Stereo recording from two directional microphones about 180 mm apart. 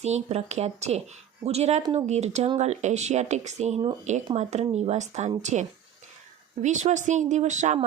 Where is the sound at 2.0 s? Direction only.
40° right (ahead or behind).